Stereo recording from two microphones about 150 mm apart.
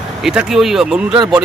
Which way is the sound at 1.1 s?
25° right (ahead or behind).